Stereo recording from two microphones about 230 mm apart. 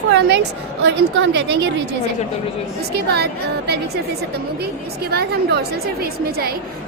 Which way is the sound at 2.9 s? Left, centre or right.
Right.